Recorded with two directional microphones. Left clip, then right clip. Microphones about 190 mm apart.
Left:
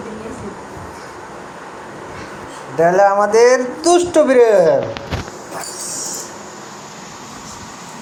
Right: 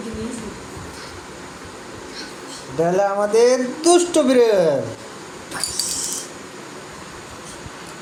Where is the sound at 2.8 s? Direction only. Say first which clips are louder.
Left 7 dB; 15° right (ahead or behind).